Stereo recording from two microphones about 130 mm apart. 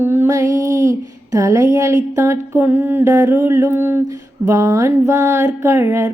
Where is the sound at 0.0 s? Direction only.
15° right (ahead or behind).